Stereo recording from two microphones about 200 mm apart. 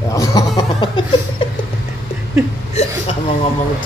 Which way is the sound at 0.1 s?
15° left (ahead or behind).